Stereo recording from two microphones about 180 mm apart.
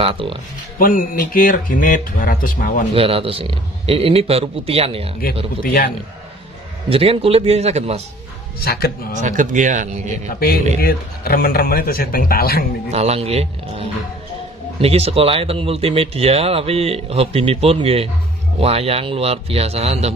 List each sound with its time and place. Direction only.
0.0 s speech: 30° right (ahead or behind)
0.7 s speech: 50° left (ahead or behind)
2.9 s speech: 30° right (ahead or behind)
5.6 s speech: 55° left (ahead or behind)
6.9 s speech: 30° right (ahead or behind)
8.5 s a man's voice: 55° left (ahead or behind)
9.1 s speech: 45° right (ahead or behind)
10.4 s a man's voice: 55° left (ahead or behind)
12.9 s speech: 35° right (ahead or behind)